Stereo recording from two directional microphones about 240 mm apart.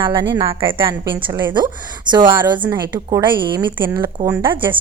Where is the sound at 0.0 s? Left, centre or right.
Centre.